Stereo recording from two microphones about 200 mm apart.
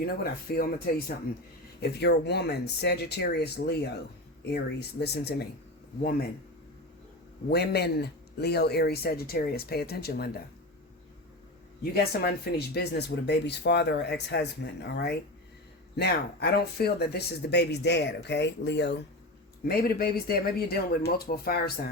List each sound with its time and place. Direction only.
0.0 s speech: 50° left (ahead or behind)
7.5 s speech: 55° left (ahead or behind)
11.8 s speech: 50° left (ahead or behind)